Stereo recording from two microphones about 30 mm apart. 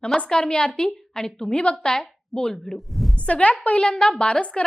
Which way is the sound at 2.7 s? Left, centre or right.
Centre.